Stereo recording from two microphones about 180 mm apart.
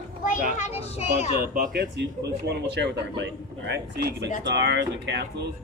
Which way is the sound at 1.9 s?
70° right (ahead or behind).